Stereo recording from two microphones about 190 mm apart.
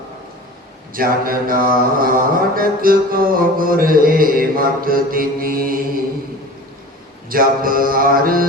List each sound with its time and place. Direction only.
0.9 s mantra: 50° right (ahead or behind)
7.3 s mantra: 50° right (ahead or behind)